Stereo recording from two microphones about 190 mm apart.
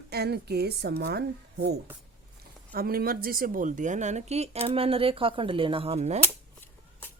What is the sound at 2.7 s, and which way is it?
Speech, 50° right (ahead or behind).